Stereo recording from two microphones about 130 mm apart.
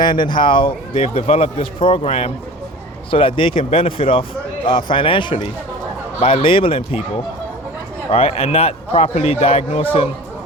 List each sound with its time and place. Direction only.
0.0 s speech: 35° left (ahead or behind)
8.1 s speech: 50° left (ahead or behind)